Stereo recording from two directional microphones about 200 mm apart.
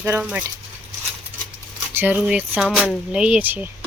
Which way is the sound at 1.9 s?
10° right (ahead or behind).